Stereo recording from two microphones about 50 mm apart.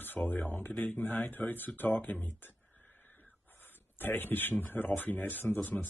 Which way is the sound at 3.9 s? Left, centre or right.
Left.